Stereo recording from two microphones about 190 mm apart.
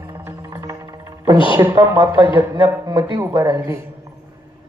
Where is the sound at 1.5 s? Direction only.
15° right (ahead or behind).